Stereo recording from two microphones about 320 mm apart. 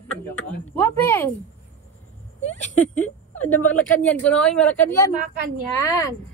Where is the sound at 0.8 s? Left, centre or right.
Centre.